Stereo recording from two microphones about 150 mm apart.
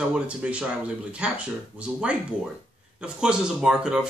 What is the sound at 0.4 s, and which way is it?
Speech, 5° right (ahead or behind).